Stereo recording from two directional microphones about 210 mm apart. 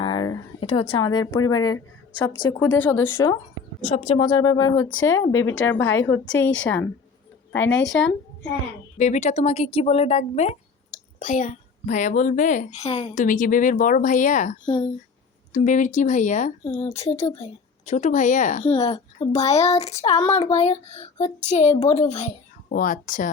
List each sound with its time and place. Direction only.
0.0 s a sound: 20° left (ahead or behind)
0.8 s a woman's voice: 20° left (ahead or behind)
3.8 s speech: 30° left (ahead or behind)
4.2 s a woman's voice: 20° left (ahead or behind)
6.2 s a woman's voice: 65° left (ahead or behind)
9.0 s speech: 35° left (ahead or behind)
15.5 s speech: 35° left (ahead or behind)